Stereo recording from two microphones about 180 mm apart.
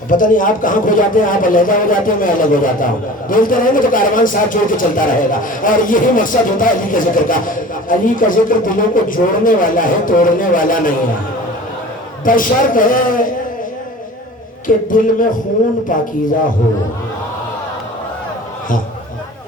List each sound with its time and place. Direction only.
0.1 s a man's voice: 50° left (ahead or behind)
12.2 s a man's voice: 50° left (ahead or behind)
14.8 s a man's voice: 50° left (ahead or behind)